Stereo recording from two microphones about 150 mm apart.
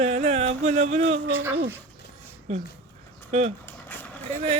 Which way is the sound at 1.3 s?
15° right (ahead or behind).